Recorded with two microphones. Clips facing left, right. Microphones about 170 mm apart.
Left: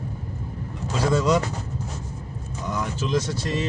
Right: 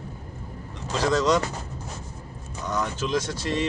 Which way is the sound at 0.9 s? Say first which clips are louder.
Even; 5° left (ahead or behind).